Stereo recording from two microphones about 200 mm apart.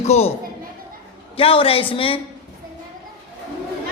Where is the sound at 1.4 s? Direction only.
30° left (ahead or behind).